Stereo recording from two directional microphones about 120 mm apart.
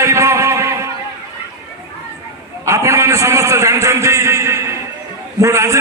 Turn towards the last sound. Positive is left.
turn(degrees=-25)  # may be behind; listen again after turning